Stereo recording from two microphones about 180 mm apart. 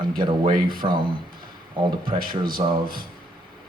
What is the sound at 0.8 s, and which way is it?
Speech, 25° right (ahead or behind).